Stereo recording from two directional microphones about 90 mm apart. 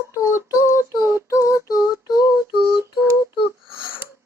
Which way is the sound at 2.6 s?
35° right (ahead or behind).